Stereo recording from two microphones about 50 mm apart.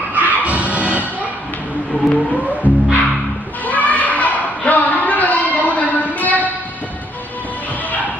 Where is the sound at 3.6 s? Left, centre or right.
Left.